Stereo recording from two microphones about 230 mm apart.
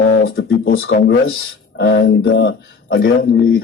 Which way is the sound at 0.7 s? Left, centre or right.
Left.